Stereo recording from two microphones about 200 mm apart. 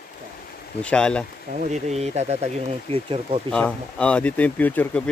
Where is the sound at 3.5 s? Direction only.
5° left (ahead or behind).